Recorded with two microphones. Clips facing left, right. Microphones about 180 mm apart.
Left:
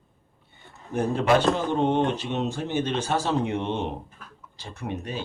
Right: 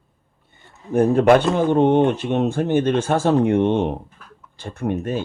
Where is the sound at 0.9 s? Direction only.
55° right (ahead or behind).